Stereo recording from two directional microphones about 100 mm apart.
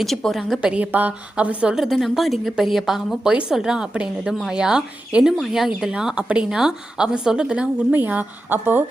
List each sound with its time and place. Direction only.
0.0 s a woman's voice: centre (ahead or behind)
0.7 s a woman's voice: 15° right (ahead or behind)